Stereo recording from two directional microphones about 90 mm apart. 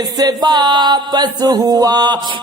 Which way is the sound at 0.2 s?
45° right (ahead or behind).